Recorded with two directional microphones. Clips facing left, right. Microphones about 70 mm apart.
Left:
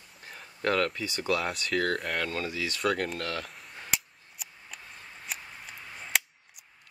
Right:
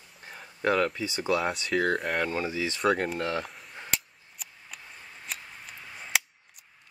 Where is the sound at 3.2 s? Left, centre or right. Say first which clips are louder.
Right 4 dB; right.